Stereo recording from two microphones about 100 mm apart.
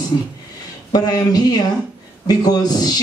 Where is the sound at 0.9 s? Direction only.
40° left (ahead or behind).